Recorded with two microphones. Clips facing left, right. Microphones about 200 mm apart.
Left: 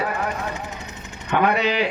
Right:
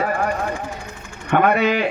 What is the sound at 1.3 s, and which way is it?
Speech, 50° right (ahead or behind).